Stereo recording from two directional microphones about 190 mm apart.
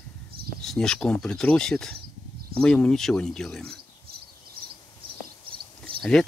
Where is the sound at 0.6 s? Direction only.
5° left (ahead or behind).